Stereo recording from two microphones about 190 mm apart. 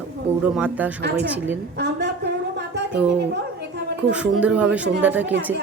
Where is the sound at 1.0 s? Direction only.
60° right (ahead or behind).